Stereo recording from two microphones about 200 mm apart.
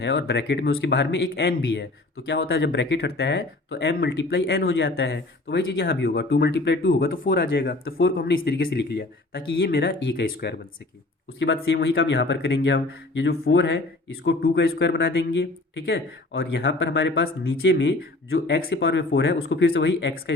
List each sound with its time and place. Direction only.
0.0 s speech: 55° left (ahead or behind)
8.4 s speech: 55° left (ahead or behind)
11.3 s speech: 60° left (ahead or behind)